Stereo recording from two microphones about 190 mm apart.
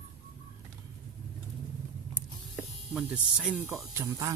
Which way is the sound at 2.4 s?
Centre (ahead or behind).